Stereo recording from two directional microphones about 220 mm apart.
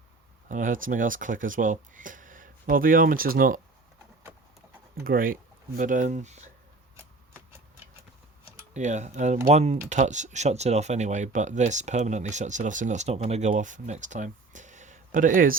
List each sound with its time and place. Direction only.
0.4 s speech: 35° right (ahead or behind)
5.0 s speech: 40° right (ahead or behind)
8.7 s speech: 30° right (ahead or behind)